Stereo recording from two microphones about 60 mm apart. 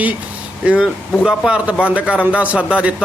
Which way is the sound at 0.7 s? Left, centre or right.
Centre.